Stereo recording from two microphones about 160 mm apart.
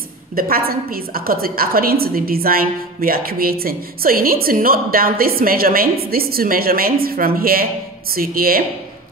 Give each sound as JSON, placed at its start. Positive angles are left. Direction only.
{"t": 0.4, "sound": "a woman's voice", "side_deg": -65}